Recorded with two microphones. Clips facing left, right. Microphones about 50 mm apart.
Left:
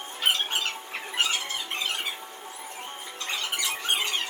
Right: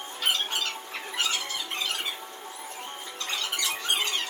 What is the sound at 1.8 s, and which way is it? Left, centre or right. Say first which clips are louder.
Squeak: left 1 dB; left.